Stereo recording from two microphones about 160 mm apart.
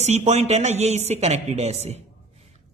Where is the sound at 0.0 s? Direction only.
45° right (ahead or behind).